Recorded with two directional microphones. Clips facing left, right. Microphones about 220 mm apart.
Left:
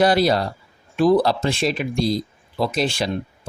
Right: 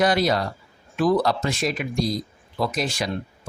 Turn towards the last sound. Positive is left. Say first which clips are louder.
# left 4 dB
turn(degrees=30)  # may be behind; listen again after turning